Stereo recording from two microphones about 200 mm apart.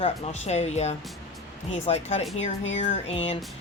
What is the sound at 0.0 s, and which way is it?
A woman's voice, 35° left (ahead or behind).